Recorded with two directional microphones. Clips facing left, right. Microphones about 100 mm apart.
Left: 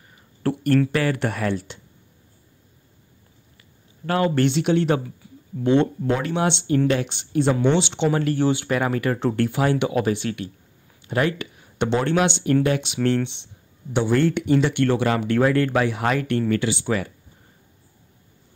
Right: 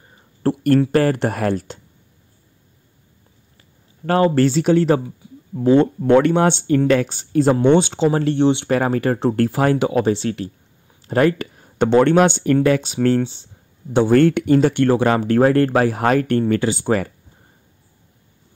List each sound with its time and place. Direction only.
0.1 s a sound: 35° right (ahead or behind)
0.7 s speech: 40° right (ahead or behind)
3.5 s speech: 35° right (ahead or behind)
5.2 s a sound: 20° right (ahead or behind)
5.6 s speech: 35° right (ahead or behind)
6.0 s speech: 65° right (ahead or behind)
6.4 s speech: 45° right (ahead or behind); by 8.6 s 25° right (ahead or behind)
8.6 s speech: 35° right (ahead or behind)
11.0 s a sound: 40° right (ahead or behind)
12.0 s speech: 50° right (ahead or behind)
14.1 s speech: 50° right (ahead or behind)